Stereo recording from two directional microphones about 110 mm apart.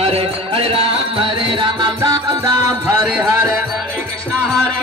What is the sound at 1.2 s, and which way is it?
Music, 45° right (ahead or behind).